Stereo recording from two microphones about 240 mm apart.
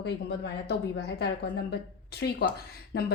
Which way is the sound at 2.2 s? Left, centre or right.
Left.